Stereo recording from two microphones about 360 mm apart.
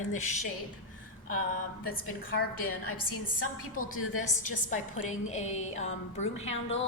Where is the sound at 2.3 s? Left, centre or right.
Left.